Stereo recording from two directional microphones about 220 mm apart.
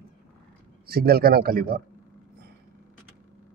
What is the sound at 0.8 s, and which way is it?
A man's voice, 45° right (ahead or behind).